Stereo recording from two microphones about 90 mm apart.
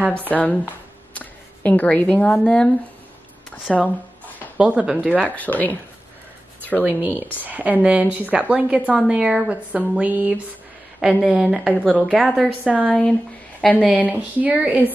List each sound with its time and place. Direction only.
0.3 s speech: 15° left (ahead or behind)
3.7 s speech: centre (ahead or behind)
4.6 s a woman's voice: 10° right (ahead or behind)
5.2 s speech: 15° left (ahead or behind)
6.8 s a woman's voice: 20° right (ahead or behind)
11.0 s a woman's voice: 5° right (ahead or behind)
12.8 s speech: 10° left (ahead or behind)
14.0 s a woman's voice: 20° right (ahead or behind)